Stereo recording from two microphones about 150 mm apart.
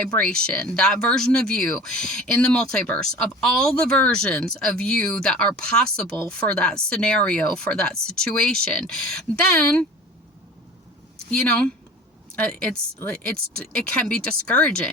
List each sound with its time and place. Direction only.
0.0 s speech: 5° left (ahead or behind)
11.3 s speech: 5° left (ahead or behind)
13.3 s speech: 90° right
13.7 s speech: 5° left (ahead or behind)